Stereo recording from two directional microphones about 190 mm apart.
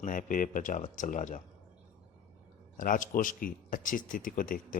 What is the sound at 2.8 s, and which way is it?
Speech, 45° left (ahead or behind).